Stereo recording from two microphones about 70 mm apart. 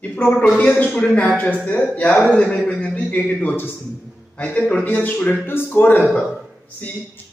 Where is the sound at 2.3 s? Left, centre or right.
Centre.